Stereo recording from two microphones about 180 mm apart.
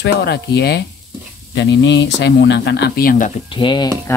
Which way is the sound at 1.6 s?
75° left (ahead or behind).